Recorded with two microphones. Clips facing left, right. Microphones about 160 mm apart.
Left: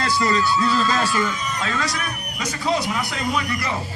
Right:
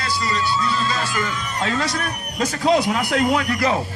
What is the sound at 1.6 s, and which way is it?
Speech, 30° right (ahead or behind).